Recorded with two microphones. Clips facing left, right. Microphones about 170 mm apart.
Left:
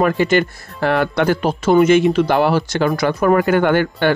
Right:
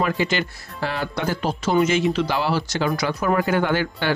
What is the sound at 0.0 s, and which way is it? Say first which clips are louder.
Speech: left 7 dB; 50° left (ahead or behind).